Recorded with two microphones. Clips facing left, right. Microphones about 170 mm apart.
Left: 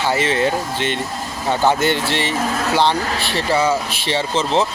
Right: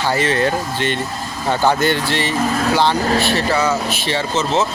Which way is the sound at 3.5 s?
25° left (ahead or behind).